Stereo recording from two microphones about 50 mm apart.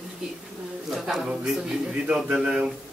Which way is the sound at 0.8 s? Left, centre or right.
Centre.